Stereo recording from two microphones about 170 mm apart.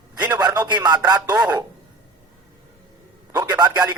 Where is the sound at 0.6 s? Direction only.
25° right (ahead or behind).